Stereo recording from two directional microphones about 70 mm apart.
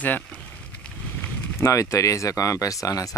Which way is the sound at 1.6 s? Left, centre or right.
Left.